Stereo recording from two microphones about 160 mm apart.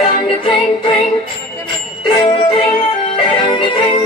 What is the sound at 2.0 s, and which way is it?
Music, 30° left (ahead or behind).